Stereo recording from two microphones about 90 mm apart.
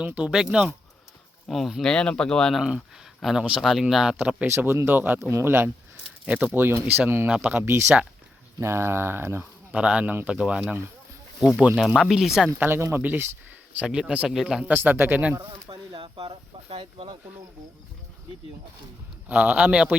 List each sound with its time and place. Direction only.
0.0 s speech: 15° right (ahead or behind)
1.9 s speech: 10° left (ahead or behind)
4.2 s speech: 15° right (ahead or behind)
4.4 s speech: 25° right (ahead or behind)
6.2 s speech: 15° right (ahead or behind)
9.7 s speech: 15° right (ahead or behind)
10.6 s speech: 25° right (ahead or behind)
11.5 s speech: 15° right (ahead or behind)
12.5 s speech: 25° right (ahead or behind)
13.7 s speech: 5° right (ahead or behind)
15.7 s a sound: 75° right (ahead or behind)
16.6 s speech: 90° right
19.3 s speech: 15° right (ahead or behind)